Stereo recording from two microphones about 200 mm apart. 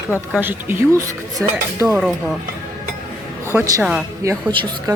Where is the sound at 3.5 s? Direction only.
15° right (ahead or behind).